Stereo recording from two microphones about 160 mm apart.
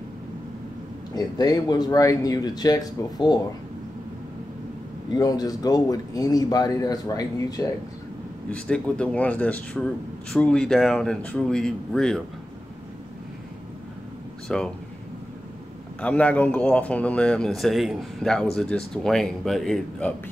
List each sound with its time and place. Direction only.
1.1 s speech: 25° left (ahead or behind)
5.1 s speech: 25° left (ahead or behind)
8.5 s speech: 5° left (ahead or behind)
14.5 s speech: 5° left (ahead or behind)
16.0 s speech: 10° left (ahead or behind)